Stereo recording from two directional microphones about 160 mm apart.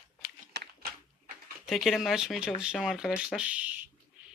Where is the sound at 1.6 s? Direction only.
Centre (ahead or behind).